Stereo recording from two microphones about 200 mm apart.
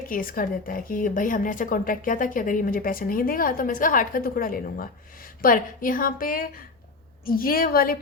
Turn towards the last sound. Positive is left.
turn(degrees=45)  # may be behind; listen again after turning